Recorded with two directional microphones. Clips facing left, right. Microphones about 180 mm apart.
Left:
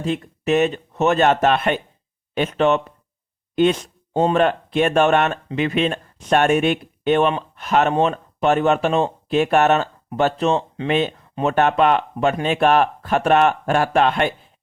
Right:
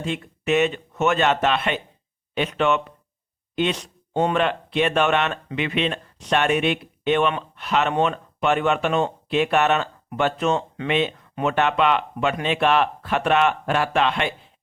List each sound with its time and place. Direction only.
0.0 s speech: 40° left (ahead or behind)
4.1 s speech: 30° left (ahead or behind)